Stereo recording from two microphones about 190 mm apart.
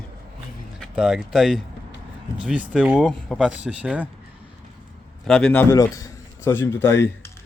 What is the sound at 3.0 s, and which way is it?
A man's voice, 5° left (ahead or behind).